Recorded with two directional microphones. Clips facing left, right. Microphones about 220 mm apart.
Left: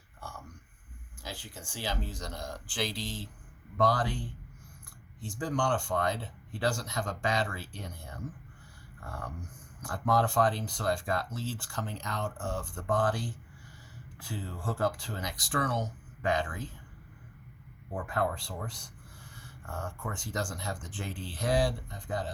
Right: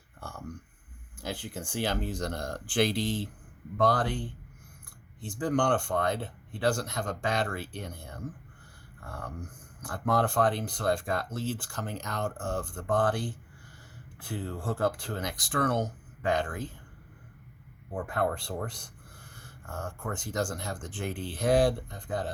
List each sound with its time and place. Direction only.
1.2 s speech: 55° right (ahead or behind)
10.1 s speech: 55° right (ahead or behind)
18.2 s a sound: 60° right (ahead or behind)
20.1 s speech: 50° right (ahead or behind)